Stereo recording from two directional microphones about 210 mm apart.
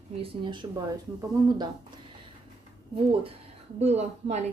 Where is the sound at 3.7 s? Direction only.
30° right (ahead or behind).